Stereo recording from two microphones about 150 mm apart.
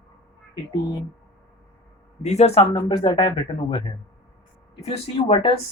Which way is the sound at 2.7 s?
30° left (ahead or behind).